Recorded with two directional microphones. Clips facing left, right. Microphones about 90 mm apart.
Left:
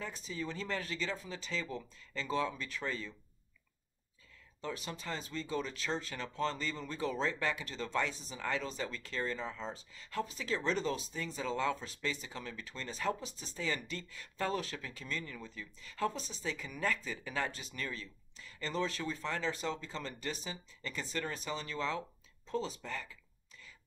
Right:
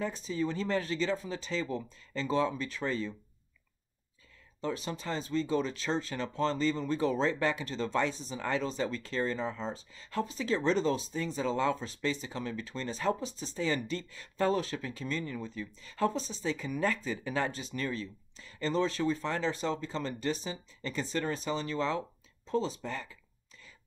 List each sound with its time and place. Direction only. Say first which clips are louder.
0.0 s speech: right 8 dB; 35° right (ahead or behind)
4.6 s speech: right 6 dB; 30° right (ahead or behind)